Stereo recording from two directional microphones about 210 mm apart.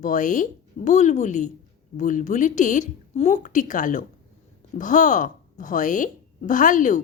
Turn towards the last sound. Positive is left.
turn(degrees=35)  # may be behind; listen again after turning